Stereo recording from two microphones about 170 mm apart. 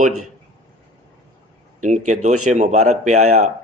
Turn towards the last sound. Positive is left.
turn(degrees=-45)  # may be behind; listen again after turning